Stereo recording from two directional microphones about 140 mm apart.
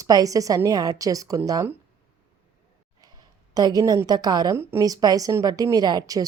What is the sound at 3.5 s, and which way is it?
A woman's voice, 25° right (ahead or behind).